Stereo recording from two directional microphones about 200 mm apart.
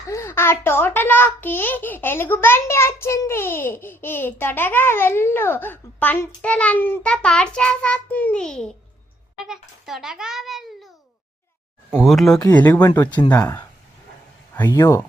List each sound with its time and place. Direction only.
0.1 s a child's voice: 15° left (ahead or behind)
11.9 s a child's voice: centre (ahead or behind)